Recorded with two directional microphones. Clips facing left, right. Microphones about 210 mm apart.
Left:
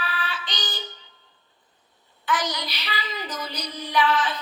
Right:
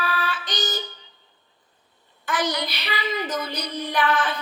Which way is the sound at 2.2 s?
60° right (ahead or behind).